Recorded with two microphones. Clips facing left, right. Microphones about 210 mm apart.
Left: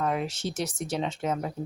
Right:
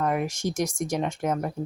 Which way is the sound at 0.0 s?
10° right (ahead or behind).